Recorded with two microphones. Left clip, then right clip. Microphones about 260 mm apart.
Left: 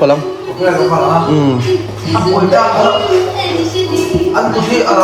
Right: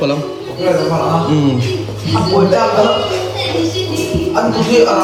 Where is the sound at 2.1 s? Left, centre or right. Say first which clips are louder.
Left 2 dB; centre.